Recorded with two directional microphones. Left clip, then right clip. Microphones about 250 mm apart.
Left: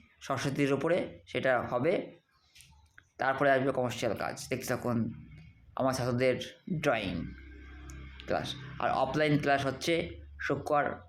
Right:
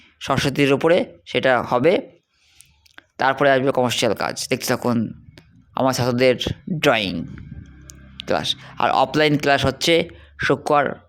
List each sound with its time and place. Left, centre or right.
0.2 s speech: right